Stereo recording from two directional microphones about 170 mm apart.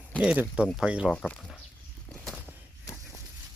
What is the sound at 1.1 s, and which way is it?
Speech, 5° left (ahead or behind).